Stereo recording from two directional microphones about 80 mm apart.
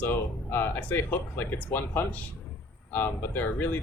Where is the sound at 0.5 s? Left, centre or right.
Left.